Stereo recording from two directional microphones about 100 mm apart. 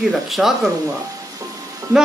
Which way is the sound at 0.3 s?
Centre (ahead or behind).